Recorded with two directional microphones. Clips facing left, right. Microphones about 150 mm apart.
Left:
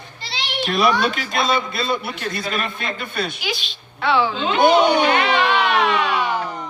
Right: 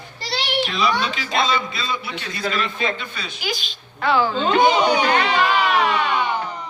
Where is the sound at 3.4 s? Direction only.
Centre (ahead or behind).